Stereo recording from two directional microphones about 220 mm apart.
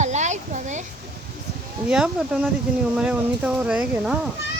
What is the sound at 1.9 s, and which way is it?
Speech, 5° right (ahead or behind).